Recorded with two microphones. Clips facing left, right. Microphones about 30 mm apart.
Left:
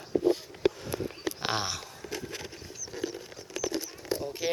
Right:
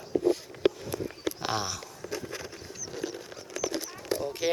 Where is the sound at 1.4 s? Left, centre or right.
Left.